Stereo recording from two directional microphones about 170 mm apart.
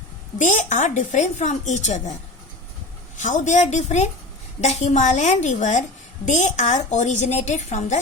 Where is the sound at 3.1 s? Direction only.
45° left (ahead or behind).